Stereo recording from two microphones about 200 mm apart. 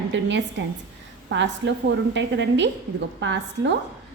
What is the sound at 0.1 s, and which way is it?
A woman's voice, 65° right (ahead or behind).